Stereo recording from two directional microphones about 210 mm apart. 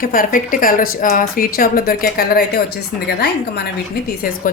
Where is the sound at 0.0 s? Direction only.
40° left (ahead or behind).